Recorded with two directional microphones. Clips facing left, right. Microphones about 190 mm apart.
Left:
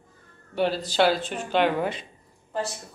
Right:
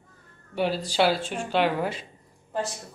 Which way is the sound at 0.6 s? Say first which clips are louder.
Left 1 dB; 10° right (ahead or behind).